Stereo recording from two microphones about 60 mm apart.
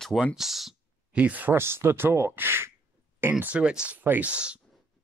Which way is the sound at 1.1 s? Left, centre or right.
Right.